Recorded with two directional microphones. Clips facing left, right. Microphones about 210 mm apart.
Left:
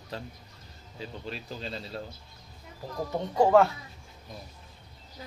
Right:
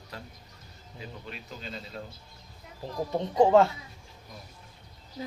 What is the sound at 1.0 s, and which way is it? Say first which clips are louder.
Speech: left 4 dB; 30° left (ahead or behind).